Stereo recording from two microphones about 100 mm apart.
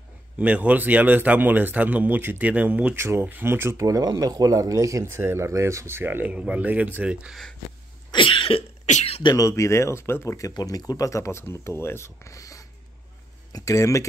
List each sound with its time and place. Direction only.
0.4 s speech: 15° right (ahead or behind)
3.0 s speech: 25° right (ahead or behind)
8.1 s cough: 60° left (ahead or behind)
9.2 s speech: 40° left (ahead or behind)
9.5 s speech: 30° left (ahead or behind)